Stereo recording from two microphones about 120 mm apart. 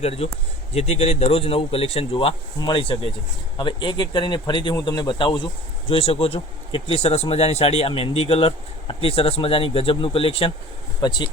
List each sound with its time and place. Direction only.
0.0 s speech: 60° left (ahead or behind)
2.6 s speech: 40° left (ahead or behind)
5.9 s speech: 55° left (ahead or behind)
11.0 s speech: 40° left (ahead or behind)